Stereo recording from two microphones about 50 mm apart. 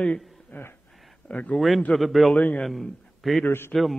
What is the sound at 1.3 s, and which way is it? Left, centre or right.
Speech, left.